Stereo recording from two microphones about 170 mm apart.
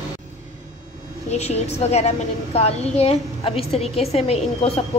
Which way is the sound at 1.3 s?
40° left (ahead or behind).